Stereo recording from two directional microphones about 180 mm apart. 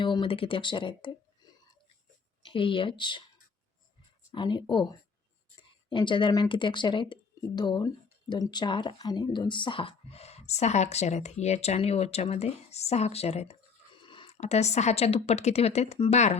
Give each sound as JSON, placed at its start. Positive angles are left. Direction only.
{"t": 0.0, "sound": "speech", "side_deg": 25}
{"t": 2.4, "sound": "speech", "side_deg": 30}
{"t": 4.3, "sound": "speech", "side_deg": 25}